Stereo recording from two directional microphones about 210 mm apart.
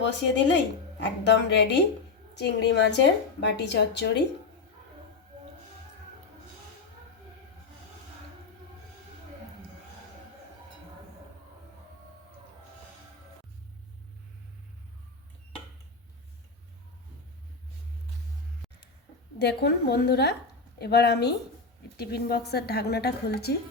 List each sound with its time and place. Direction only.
0.0 s a woman's voice: 60° left (ahead or behind)
19.4 s a woman's voice: 50° left (ahead or behind)